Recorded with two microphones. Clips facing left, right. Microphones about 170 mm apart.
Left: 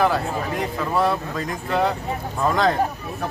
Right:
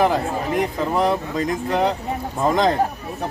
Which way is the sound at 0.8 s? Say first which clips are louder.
Left 2 dB; 20° right (ahead or behind).